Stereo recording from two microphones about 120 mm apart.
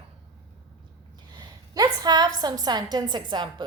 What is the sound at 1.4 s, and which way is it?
A woman's voice, 35° right (ahead or behind).